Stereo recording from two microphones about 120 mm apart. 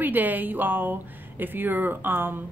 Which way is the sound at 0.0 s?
15° right (ahead or behind).